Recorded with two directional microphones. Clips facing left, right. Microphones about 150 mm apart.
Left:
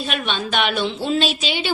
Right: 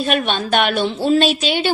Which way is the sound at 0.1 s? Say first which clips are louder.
Right 6 dB; 50° right (ahead or behind).